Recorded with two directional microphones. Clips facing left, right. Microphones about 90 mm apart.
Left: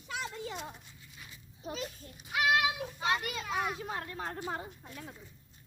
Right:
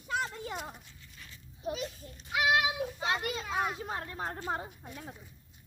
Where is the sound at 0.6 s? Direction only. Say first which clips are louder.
Right 2 dB; 5° right (ahead or behind).